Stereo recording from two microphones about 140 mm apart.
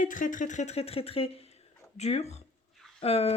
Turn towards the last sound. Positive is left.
turn(degrees=45)  # may be behind; listen again after turning